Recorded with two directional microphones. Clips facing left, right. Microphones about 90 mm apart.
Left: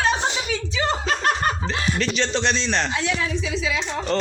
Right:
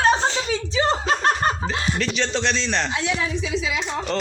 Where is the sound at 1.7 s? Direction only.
25° right (ahead or behind).